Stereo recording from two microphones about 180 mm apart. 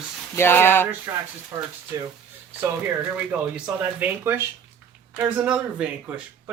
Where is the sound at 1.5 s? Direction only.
20° right (ahead or behind).